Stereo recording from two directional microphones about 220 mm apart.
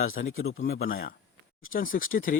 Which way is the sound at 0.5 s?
40° left (ahead or behind).